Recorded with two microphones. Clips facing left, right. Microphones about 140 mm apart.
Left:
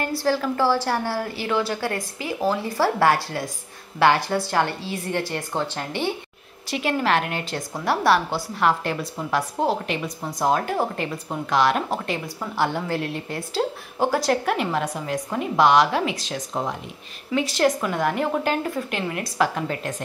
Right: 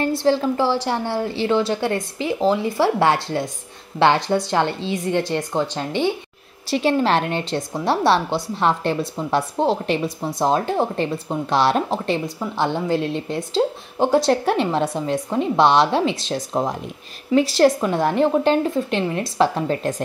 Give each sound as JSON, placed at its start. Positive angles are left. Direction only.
{"t": 0.2, "sound": "a woman's voice", "side_deg": -25}
{"t": 6.7, "sound": "a woman's voice", "side_deg": -30}